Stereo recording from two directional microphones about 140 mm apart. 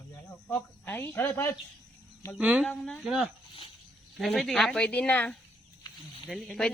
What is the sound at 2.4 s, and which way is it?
Speech, 10° right (ahead or behind).